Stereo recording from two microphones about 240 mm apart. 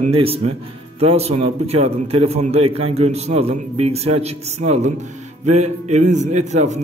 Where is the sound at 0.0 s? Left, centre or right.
Right.